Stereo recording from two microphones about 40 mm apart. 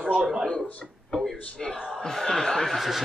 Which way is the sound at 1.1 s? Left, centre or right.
Centre.